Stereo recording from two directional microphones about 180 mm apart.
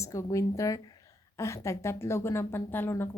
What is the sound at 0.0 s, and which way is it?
Speech, 15° left (ahead or behind).